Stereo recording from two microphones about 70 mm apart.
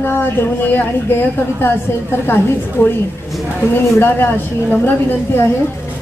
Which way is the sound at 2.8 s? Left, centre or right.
Left.